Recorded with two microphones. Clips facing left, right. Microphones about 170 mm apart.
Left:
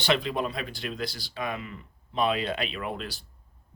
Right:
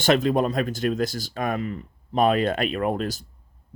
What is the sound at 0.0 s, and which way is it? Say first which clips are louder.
Speech: right 7 dB; 45° right (ahead or behind).